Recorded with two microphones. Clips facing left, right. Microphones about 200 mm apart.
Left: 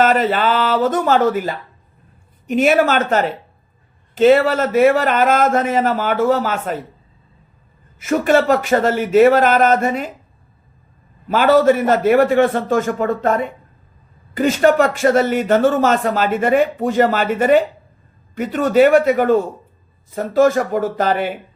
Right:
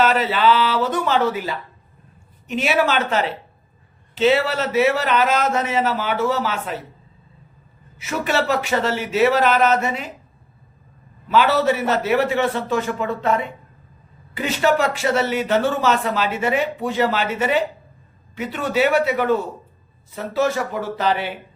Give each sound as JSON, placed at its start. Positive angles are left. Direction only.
{"t": 0.0, "sound": "speech", "side_deg": 50}
{"t": 7.9, "sound": "speech", "side_deg": 45}
{"t": 11.3, "sound": "speech", "side_deg": 45}